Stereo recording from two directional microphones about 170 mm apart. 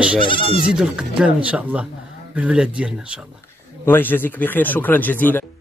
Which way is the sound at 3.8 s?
10° left (ahead or behind).